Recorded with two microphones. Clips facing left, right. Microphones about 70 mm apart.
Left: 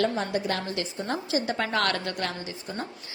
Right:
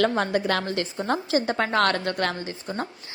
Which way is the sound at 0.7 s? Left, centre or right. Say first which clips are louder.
Right 4 dB; right.